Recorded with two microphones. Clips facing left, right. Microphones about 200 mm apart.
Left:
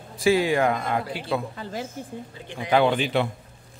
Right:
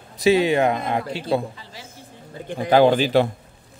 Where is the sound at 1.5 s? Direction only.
50° left (ahead or behind).